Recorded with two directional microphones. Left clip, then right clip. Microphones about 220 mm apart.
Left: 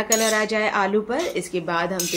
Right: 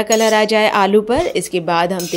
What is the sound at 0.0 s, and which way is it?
Speech, 40° right (ahead or behind).